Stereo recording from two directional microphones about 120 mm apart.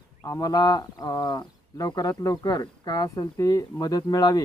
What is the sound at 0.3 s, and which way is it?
Speech, 30° left (ahead or behind).